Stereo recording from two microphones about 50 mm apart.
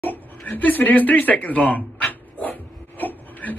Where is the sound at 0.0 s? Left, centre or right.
Left.